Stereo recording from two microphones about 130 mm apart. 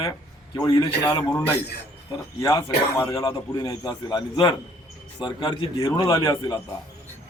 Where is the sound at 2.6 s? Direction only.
20° left (ahead or behind).